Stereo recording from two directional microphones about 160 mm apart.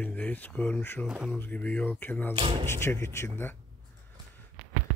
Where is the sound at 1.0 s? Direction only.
5° right (ahead or behind).